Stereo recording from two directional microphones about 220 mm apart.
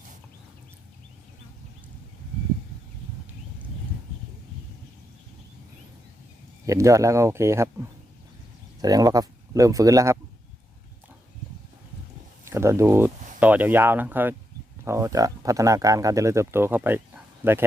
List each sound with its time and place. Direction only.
6.7 s speech: 15° right (ahead or behind)
8.8 s speech: 15° right (ahead or behind)
12.5 s speech: 10° right (ahead or behind)